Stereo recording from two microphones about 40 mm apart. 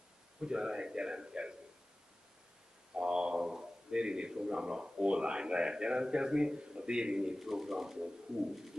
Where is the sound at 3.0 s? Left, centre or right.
Centre.